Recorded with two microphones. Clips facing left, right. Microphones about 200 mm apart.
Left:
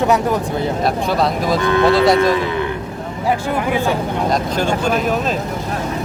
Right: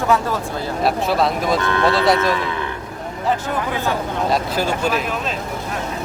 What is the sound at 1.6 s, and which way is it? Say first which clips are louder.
Speech: left 5 dB; 15° left (ahead or behind).